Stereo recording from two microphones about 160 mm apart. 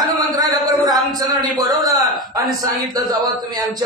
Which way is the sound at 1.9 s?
20° right (ahead or behind).